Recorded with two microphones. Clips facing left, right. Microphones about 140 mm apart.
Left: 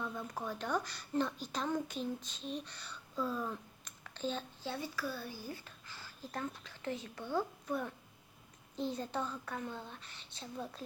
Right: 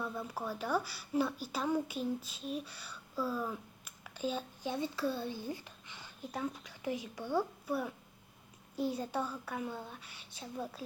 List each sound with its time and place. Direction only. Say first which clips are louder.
0.0 s speech: right 2 dB; 5° right (ahead or behind)